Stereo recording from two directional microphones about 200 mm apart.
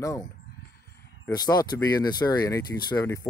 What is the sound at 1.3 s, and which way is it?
Speech, 20° left (ahead or behind).